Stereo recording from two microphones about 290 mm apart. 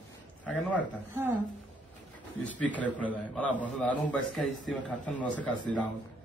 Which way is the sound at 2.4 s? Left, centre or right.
Centre.